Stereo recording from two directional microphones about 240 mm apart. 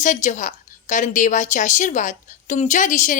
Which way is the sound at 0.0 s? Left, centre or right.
Left.